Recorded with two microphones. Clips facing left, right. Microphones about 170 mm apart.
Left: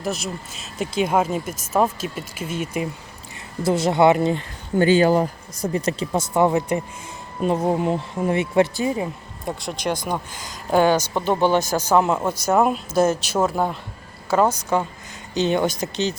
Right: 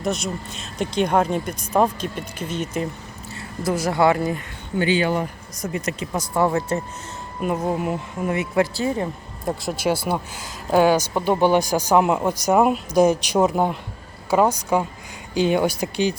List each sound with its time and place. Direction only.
0.0 s speech: centre (ahead or behind)
3.6 s speech: 25° left (ahead or behind)
4.8 s speech: 45° left (ahead or behind); by 6.8 s 15° left (ahead or behind)
7.4 s speech: 25° left (ahead or behind)
9.4 s speech: centre (ahead or behind)